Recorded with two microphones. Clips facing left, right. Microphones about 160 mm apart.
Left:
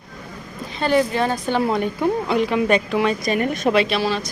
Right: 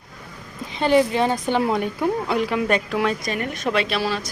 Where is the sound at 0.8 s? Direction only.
20° right (ahead or behind); by 3.2 s centre (ahead or behind).